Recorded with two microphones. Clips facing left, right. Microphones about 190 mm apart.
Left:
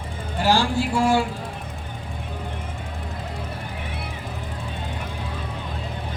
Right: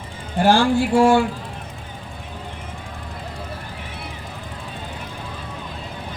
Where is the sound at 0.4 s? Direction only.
50° right (ahead or behind).